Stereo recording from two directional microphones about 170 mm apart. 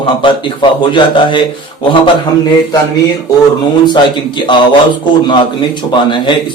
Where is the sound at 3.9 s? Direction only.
25° left (ahead or behind).